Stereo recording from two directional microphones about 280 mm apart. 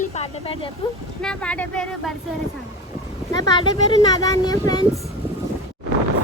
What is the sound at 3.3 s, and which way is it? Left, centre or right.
Speech, centre.